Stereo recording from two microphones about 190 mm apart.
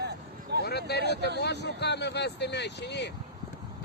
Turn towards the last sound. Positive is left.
turn(degrees=65)  # may be behind; listen again after turning